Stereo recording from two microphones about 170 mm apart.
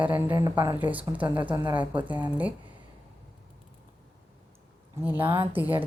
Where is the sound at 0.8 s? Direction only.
10° right (ahead or behind).